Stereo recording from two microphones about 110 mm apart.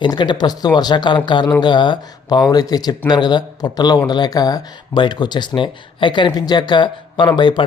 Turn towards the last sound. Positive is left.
turn(degrees=45)  # may be behind; listen again after turning